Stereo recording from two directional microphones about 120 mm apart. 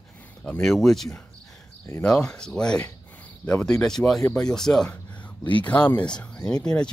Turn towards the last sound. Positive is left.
turn(degrees=10)  # may be behind; listen again after turning